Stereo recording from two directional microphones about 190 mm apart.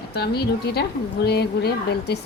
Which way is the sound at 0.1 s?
60° left (ahead or behind).